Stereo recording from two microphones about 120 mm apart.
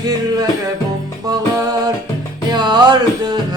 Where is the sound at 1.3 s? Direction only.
30° right (ahead or behind).